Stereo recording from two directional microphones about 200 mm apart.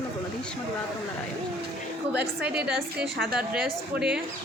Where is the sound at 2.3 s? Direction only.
5° right (ahead or behind).